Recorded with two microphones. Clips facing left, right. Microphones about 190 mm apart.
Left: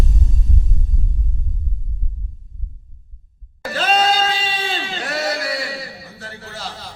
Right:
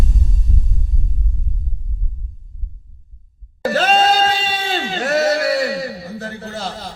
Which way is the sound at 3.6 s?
45° right (ahead or behind).